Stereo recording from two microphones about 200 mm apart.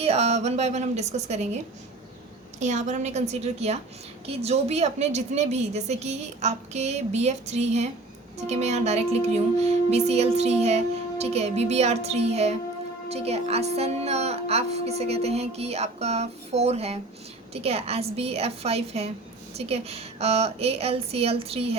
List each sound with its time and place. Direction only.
0.0 s music: 30° right (ahead or behind)
2.6 s music: 35° right (ahead or behind)